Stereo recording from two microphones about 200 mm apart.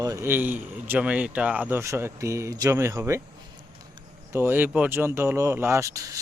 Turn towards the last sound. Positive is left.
turn(degrees=-15)  # may be behind; listen again after turning